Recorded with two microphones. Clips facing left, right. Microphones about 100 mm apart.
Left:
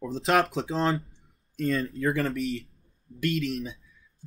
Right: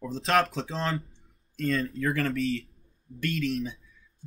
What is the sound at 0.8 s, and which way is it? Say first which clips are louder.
Speech: left 5 dB; 30° left (ahead or behind).